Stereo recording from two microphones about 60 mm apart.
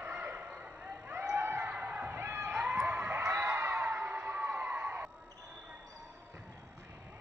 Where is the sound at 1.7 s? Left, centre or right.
Right.